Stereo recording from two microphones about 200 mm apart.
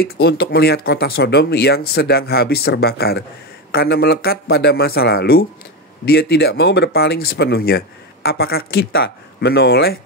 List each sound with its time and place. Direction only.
0.0 s speech: 50° left (ahead or behind)